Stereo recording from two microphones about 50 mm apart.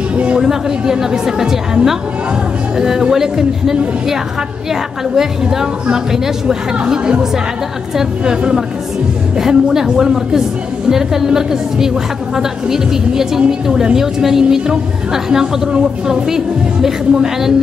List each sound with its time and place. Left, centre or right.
0.1 s music: right
0.4 s a woman's voice: centre
5.1 s a woman's voice: centre